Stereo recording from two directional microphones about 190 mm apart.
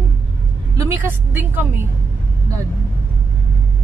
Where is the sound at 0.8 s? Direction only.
10° right (ahead or behind).